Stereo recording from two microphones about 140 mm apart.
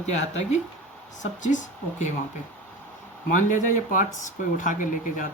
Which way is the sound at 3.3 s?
65° left (ahead or behind).